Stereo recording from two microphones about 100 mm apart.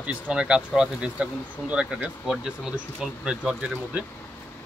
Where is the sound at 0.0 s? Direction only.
10° right (ahead or behind).